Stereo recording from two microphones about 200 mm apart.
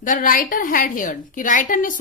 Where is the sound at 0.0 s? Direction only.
40° left (ahead or behind).